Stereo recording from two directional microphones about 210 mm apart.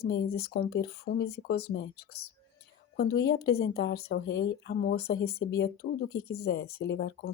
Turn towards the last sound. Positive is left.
turn(degrees=55)  # may be behind; listen again after turning